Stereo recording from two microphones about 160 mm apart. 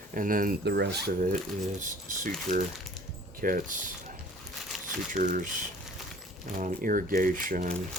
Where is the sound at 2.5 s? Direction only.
55° right (ahead or behind).